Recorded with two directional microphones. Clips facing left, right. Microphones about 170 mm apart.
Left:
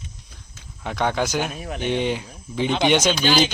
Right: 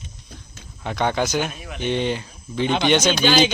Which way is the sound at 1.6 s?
35° left (ahead or behind).